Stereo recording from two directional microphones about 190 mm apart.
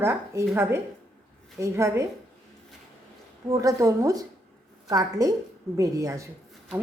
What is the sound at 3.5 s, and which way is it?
A woman's voice, 15° right (ahead or behind).